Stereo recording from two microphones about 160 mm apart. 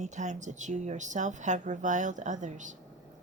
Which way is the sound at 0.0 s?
50° right (ahead or behind).